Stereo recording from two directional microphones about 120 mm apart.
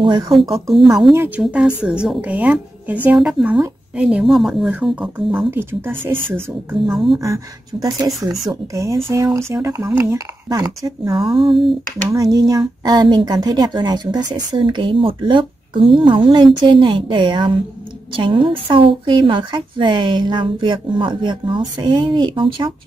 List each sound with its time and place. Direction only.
0.0 s speech: 40° right (ahead or behind)
0.3 s speech: centre (ahead or behind)
1.1 s a woman's voice: 20° right (ahead or behind)
1.4 s a woman's voice: 5° right (ahead or behind)
3.2 s a woman's voice: 5° right (ahead or behind)
6.9 s speech: centre (ahead or behind)
7.2 s a woman's voice: 25° right (ahead or behind)
11.3 s speech: centre (ahead or behind)
12.1 s speech: 30° right (ahead or behind)